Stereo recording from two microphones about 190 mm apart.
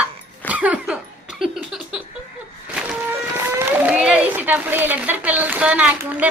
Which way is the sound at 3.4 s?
10° right (ahead or behind).